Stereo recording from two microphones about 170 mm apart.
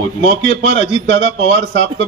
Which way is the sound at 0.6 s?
90° right.